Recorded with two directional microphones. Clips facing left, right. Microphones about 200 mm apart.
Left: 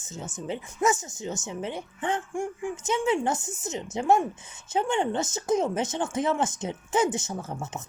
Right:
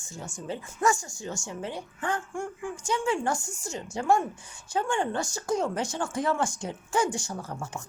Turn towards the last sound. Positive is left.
turn(degrees=20)  # may be behind; listen again after turning